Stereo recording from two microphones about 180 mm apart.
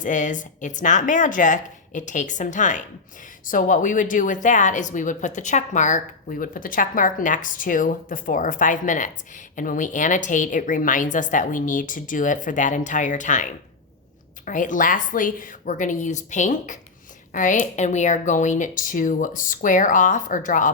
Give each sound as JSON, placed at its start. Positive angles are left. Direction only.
{"t": 0.0, "sound": "a woman's voice", "side_deg": 45}